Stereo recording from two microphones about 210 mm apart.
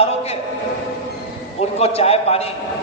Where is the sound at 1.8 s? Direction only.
30° left (ahead or behind).